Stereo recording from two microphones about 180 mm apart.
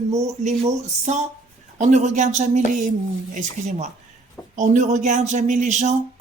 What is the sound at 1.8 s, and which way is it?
Speech, 40° right (ahead or behind).